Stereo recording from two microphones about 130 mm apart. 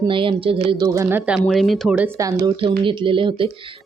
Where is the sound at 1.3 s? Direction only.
Centre (ahead or behind).